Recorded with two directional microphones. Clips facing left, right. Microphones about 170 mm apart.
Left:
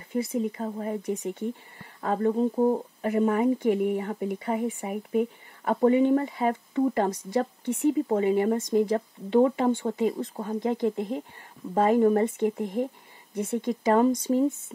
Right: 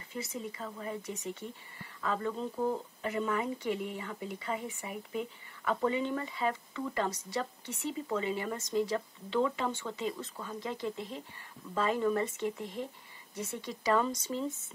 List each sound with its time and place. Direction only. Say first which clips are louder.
0.1 s speech: left 12 dB; 55° left (ahead or behind)
3.0 s a woman's voice: left 10 dB; 55° left (ahead or behind)